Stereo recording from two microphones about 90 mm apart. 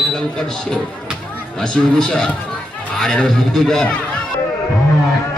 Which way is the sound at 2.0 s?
5° left (ahead or behind).